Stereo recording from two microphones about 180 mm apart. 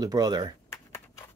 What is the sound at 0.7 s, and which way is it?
Typing, 15° left (ahead or behind).